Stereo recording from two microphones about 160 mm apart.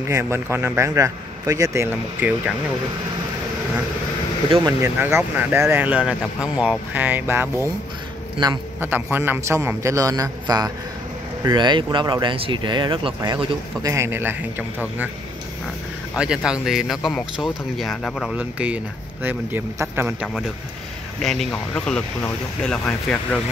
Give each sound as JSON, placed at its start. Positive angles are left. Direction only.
{"t": 0.1, "sound": "a man's voice", "side_deg": -15}
{"t": 4.8, "sound": "a man's voice", "side_deg": -15}
{"t": 8.7, "sound": "a man's voice", "side_deg": -15}
{"t": 16.2, "sound": "a man's voice", "side_deg": -5}
{"t": 21.2, "sound": "speech", "side_deg": 0}